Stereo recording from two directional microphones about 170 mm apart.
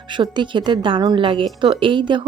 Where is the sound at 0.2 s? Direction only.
30° right (ahead or behind).